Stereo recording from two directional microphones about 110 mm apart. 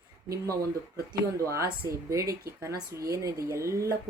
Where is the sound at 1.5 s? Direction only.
30° right (ahead or behind).